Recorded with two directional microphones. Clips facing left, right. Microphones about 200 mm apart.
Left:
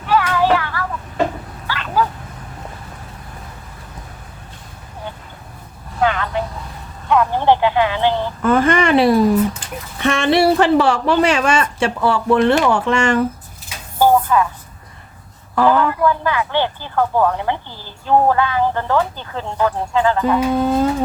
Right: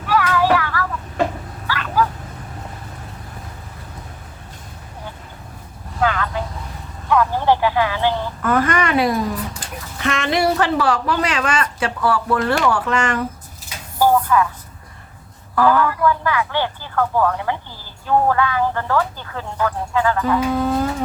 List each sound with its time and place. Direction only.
0.1 s child singing: 25° left (ahead or behind)
1.6 s dog: 25° left (ahead or behind)
6.0 s vehicle: 20° left (ahead or behind)
7.1 s a sound: 20° left (ahead or behind)
10.0 s speech: 30° left (ahead or behind)
14.0 s chopping: 25° left (ahead or behind)
15.5 s speech: 25° left (ahead or behind)